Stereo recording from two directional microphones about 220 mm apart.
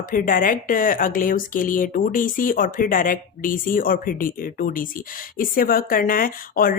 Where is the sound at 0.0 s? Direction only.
40° left (ahead or behind).